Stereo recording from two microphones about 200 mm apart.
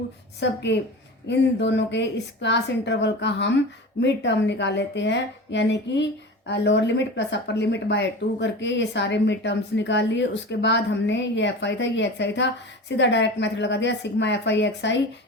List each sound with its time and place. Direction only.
0.3 s speech: 60° left (ahead or behind)